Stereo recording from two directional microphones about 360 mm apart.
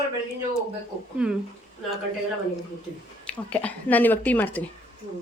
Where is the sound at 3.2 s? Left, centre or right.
Centre.